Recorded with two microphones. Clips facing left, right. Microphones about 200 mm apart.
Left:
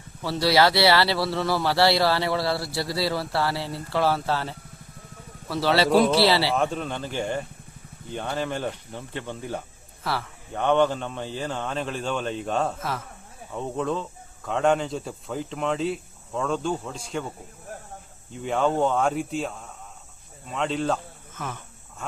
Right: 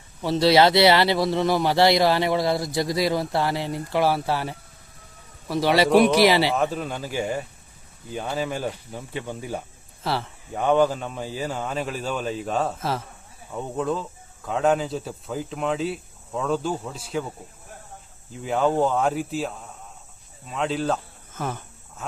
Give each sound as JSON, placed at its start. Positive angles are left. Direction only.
{"t": 0.2, "sound": "speech", "side_deg": -20}
{"t": 6.6, "sound": "speech", "side_deg": -5}
{"t": 10.0, "sound": "speech", "side_deg": -25}
{"t": 10.5, "sound": "speech", "side_deg": -5}
{"t": 18.4, "sound": "speech", "side_deg": -5}
{"t": 21.3, "sound": "speech", "side_deg": -40}